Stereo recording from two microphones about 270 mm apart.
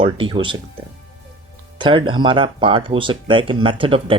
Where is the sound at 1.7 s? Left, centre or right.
Centre.